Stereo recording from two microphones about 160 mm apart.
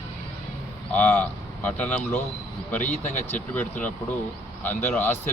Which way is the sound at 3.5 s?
10° left (ahead or behind).